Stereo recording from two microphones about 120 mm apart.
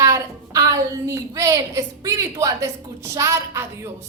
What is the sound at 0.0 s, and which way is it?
A woman's voice, 25° right (ahead or behind).